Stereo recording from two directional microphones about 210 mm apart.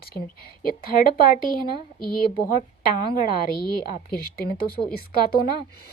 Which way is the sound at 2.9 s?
40° left (ahead or behind).